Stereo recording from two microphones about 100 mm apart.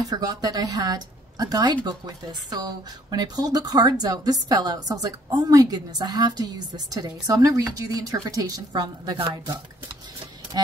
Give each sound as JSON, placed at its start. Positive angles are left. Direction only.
{"t": 0.1, "sound": "speech", "side_deg": -40}